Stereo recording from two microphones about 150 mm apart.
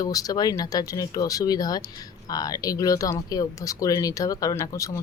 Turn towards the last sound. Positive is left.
turn(degrees=20)  # may be behind; listen again after turning